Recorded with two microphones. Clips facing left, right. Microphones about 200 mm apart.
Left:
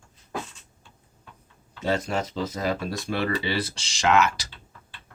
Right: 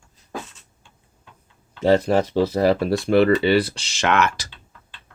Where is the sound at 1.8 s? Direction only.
35° right (ahead or behind).